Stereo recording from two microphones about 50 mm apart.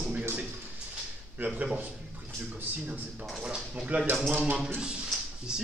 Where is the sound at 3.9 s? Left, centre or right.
Right.